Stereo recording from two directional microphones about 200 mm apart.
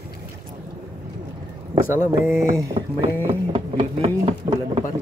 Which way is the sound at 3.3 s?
25° right (ahead or behind).